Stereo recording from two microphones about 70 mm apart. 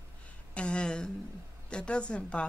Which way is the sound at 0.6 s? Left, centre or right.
Centre.